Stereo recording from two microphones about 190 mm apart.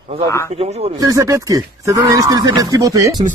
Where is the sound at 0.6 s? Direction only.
30° right (ahead or behind).